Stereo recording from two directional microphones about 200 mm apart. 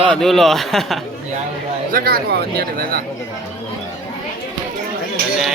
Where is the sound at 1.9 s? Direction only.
50° right (ahead or behind).